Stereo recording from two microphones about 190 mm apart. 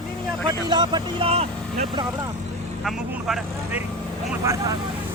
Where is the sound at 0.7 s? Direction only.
25° right (ahead or behind).